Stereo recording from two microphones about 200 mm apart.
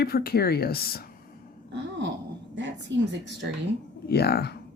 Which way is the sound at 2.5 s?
65° right (ahead or behind).